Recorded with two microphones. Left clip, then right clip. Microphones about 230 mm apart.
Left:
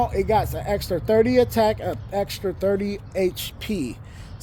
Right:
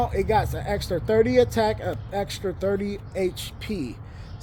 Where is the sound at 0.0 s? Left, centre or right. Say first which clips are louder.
Left 2 dB; left.